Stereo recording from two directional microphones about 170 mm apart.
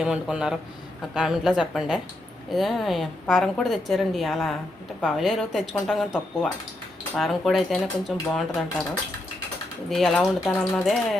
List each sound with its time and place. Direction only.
0.0 s a woman's voice: 5° right (ahead or behind)
9.9 s a woman's voice: centre (ahead or behind)